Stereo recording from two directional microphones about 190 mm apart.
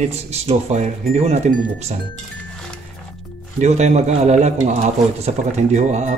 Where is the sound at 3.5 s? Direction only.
35° right (ahead or behind).